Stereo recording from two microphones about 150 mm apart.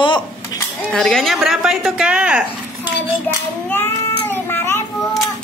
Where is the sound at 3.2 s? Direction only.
15° left (ahead or behind).